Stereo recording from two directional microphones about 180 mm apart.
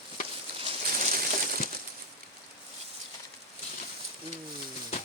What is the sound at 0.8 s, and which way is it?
Crushing, 55° right (ahead or behind).